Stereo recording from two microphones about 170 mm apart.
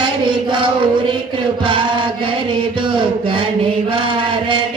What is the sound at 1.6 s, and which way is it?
Mantra, 30° right (ahead or behind).